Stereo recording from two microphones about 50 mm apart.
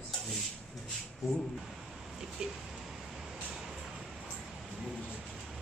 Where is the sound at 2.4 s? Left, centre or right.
Centre.